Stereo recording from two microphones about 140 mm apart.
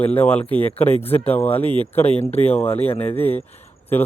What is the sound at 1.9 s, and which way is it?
Speech, 45° left (ahead or behind).